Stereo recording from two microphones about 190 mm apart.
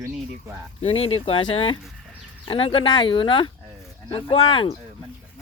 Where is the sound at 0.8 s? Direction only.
30° left (ahead or behind).